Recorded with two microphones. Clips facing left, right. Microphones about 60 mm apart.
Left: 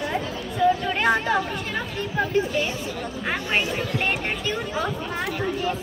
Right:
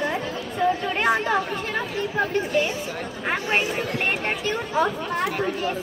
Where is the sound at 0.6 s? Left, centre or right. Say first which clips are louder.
Left 2 dB; right.